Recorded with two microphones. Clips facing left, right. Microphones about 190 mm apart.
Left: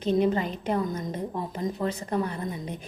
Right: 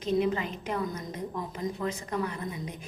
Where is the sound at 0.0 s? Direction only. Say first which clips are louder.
Left 4 dB; 30° left (ahead or behind).